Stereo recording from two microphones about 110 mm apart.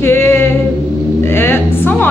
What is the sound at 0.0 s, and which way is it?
Singing, 20° left (ahead or behind).